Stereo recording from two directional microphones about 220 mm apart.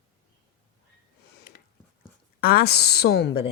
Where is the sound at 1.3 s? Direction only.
45° left (ahead or behind).